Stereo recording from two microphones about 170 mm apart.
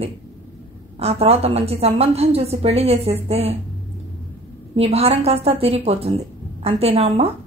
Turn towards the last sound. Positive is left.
turn(degrees=-35)  # may be behind; listen again after turning